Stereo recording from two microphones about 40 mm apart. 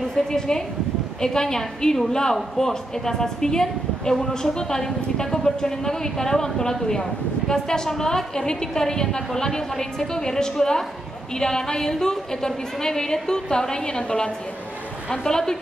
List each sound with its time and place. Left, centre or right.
0.1 s a woman's voice: centre